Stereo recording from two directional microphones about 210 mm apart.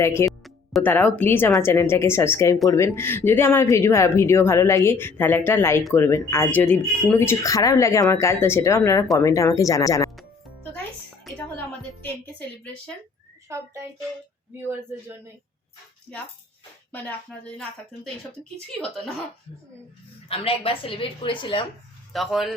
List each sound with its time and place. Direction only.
0.0 s speech: 15° left (ahead or behind)
11.3 s music: 5° left (ahead or behind)
12.0 s speech: 5° left (ahead or behind)
13.5 s a child's voice: 15° right (ahead or behind)
16.1 s a woman's voice: 5° left (ahead or behind)
20.2 s a woman's voice: 30° left (ahead or behind)
22.1 s a woman's voice: centre (ahead or behind)